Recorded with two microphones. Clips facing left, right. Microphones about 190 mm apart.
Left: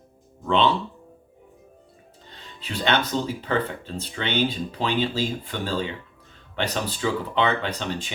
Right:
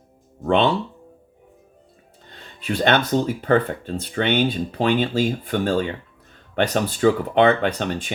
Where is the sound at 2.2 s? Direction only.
55° right (ahead or behind).